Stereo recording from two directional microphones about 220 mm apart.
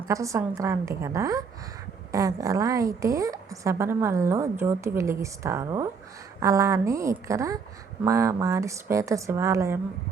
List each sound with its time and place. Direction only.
0.1 s a woman's voice: 15° right (ahead or behind)